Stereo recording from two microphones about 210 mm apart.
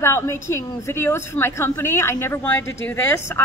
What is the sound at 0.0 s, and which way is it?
A woman's voice, 15° left (ahead or behind).